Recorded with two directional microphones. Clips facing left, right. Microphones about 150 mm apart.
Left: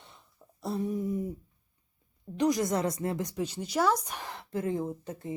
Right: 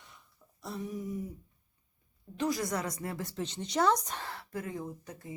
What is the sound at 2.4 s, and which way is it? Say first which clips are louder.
Speech: left 5 dB; 20° left (ahead or behind).